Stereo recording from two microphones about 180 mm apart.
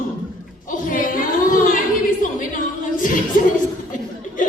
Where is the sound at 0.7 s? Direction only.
50° left (ahead or behind).